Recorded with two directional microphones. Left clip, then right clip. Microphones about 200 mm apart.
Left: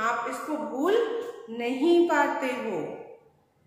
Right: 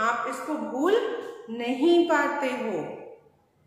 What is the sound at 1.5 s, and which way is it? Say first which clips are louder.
A woman's voice: right 1 dB; 10° right (ahead or behind).